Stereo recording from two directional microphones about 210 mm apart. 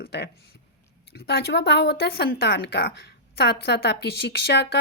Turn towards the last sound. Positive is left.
turn(degrees=50)  # may be behind; listen again after turning